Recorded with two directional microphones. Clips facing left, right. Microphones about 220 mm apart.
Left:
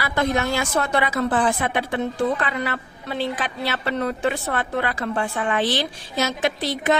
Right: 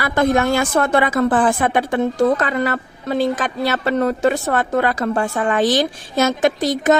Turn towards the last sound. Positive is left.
turn(degrees=-45)  # may be behind; listen again after turning